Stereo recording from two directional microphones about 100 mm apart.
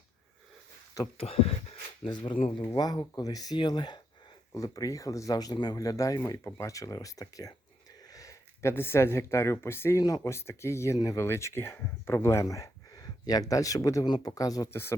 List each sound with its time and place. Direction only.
1.2 s speech: 90° left
2.0 s speech: 50° left (ahead or behind)
4.5 s speech: 35° left (ahead or behind)
14.7 s speech: 25° left (ahead or behind)